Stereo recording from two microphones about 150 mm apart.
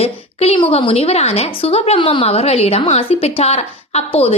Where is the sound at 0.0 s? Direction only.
40° left (ahead or behind).